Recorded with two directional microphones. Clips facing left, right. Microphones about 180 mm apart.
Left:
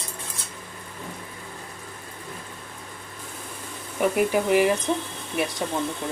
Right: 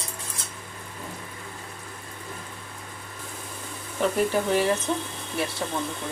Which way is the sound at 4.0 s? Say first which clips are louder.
Left 2 dB; 15° left (ahead or behind).